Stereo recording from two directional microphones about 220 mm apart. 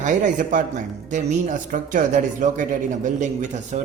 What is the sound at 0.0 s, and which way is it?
Speech, 35° right (ahead or behind).